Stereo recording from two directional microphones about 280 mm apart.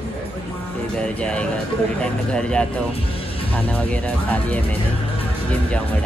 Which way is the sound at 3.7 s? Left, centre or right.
Centre.